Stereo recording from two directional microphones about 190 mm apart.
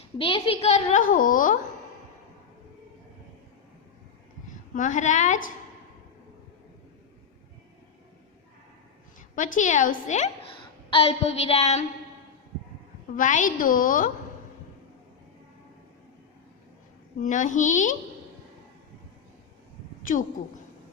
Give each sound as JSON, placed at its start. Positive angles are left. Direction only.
{"t": 0.2, "sound": "a woman's voice", "side_deg": 30}
{"t": 4.7, "sound": "a woman's voice", "side_deg": 40}
{"t": 9.3, "sound": "a woman's voice", "side_deg": 40}
{"t": 13.1, "sound": "a woman's voice", "side_deg": 40}
{"t": 17.2, "sound": "a woman's voice", "side_deg": 40}
{"t": 20.0, "sound": "a woman's voice", "side_deg": 45}